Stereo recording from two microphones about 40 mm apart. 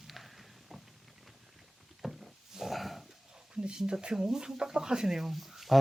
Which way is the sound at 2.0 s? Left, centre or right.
Centre.